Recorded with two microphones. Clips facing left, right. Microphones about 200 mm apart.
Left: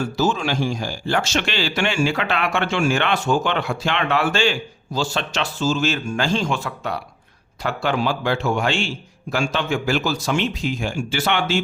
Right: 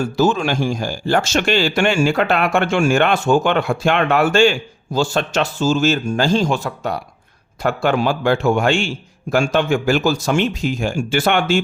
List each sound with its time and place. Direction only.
0.2 s speech: 50° right (ahead or behind)